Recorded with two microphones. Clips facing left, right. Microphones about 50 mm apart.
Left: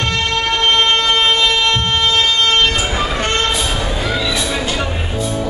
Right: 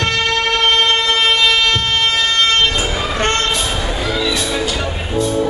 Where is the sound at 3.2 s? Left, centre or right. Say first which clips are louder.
Right 4 dB; right.